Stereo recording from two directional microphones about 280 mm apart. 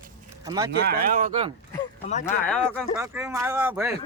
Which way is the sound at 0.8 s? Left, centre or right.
Right.